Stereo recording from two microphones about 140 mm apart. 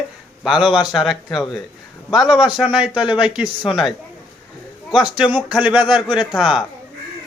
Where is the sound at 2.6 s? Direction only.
10° right (ahead or behind).